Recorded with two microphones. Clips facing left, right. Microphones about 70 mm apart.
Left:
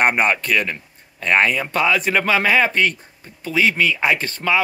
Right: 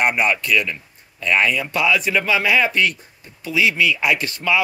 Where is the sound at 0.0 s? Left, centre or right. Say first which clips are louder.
Left 1 dB; left.